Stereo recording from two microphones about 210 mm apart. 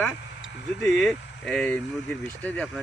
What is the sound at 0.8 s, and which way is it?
Speech, 5° left (ahead or behind).